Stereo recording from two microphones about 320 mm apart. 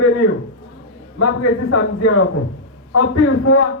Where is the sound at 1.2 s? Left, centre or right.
Left.